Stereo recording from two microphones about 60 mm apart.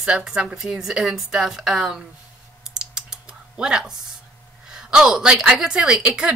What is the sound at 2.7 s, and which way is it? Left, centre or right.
Typing, centre.